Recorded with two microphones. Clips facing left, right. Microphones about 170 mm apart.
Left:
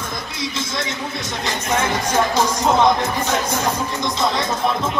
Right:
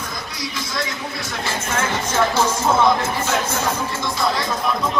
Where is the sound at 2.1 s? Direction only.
15° left (ahead or behind).